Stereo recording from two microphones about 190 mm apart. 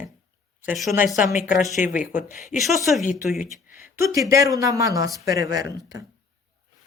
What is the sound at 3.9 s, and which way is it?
Speech, 15° right (ahead or behind).